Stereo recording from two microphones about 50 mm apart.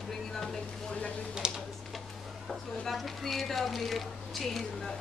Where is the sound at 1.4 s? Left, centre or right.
Centre.